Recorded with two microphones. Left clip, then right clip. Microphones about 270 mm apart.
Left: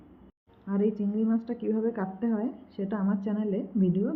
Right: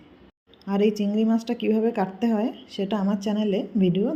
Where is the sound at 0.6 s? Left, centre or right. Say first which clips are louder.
Right 6 dB; centre.